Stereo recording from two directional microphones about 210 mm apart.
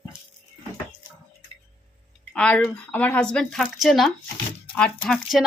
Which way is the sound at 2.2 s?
5° left (ahead or behind).